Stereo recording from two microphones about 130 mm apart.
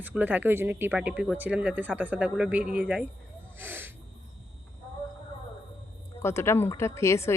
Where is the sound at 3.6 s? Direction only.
15° right (ahead or behind).